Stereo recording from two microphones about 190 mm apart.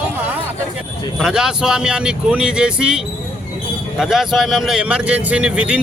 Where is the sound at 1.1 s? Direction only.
5° right (ahead or behind).